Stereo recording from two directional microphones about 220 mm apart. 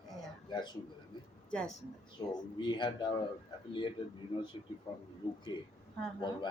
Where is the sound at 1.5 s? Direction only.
5° left (ahead or behind).